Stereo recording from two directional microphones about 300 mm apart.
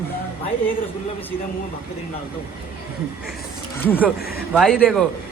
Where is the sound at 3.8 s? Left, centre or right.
Centre.